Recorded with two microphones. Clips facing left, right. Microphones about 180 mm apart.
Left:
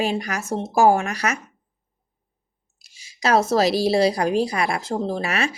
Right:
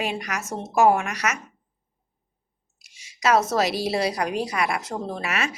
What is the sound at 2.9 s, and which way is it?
Speech, 30° left (ahead or behind).